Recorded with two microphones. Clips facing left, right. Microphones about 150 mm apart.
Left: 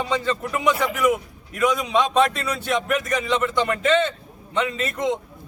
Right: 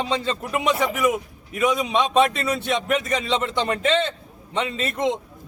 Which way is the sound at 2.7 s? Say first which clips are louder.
Left 2 dB; 25° right (ahead or behind).